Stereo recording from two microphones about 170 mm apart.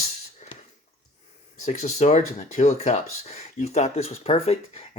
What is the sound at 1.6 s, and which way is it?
Speech, 45° left (ahead or behind).